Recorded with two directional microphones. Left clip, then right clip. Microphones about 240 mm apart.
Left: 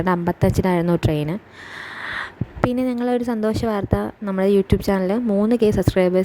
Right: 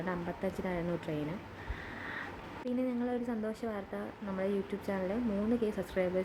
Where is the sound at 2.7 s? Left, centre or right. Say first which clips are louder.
Left 10 dB; left.